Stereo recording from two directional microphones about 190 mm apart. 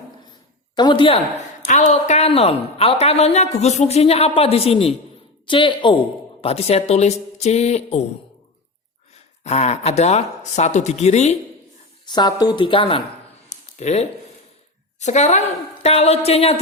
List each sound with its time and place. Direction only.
0.8 s a woman's voice: 25° left (ahead or behind)
1.6 s a woman's voice: 40° left (ahead or behind)
9.1 s a woman's voice: 35° left (ahead or behind)
12.0 s a woman's voice: 20° left (ahead or behind)
13.5 s a sound: 35° left (ahead or behind)
14.9 s a woman's voice: 35° left (ahead or behind)